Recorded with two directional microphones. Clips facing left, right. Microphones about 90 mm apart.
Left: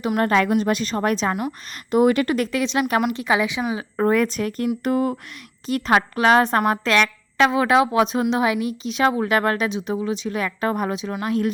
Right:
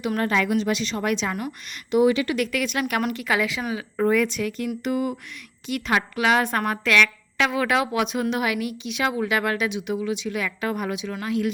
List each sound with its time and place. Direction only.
0.2 s a woman's voice: 45° left (ahead or behind)
2.3 s a woman's voice: 35° left (ahead or behind)
4.0 s a woman's voice: 40° left (ahead or behind)